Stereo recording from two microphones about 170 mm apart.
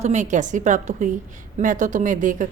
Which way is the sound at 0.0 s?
45° right (ahead or behind).